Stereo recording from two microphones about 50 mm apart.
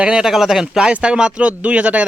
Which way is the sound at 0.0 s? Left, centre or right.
Centre.